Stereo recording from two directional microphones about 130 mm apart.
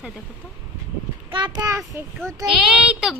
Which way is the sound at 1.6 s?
25° right (ahead or behind).